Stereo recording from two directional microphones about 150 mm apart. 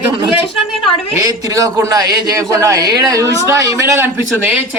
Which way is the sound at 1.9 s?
25° right (ahead or behind).